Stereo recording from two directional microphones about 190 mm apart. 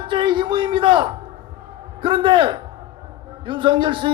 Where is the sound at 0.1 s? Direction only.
25° right (ahead or behind).